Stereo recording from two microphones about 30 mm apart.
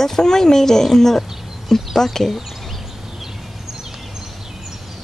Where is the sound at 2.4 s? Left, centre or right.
Centre.